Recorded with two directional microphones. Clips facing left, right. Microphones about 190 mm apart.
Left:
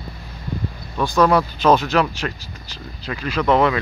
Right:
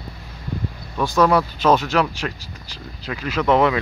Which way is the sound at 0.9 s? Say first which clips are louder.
Left 1 dB; 5° right (ahead or behind).